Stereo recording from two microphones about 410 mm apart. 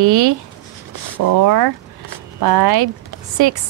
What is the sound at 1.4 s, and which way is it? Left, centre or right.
A woman's voice, right.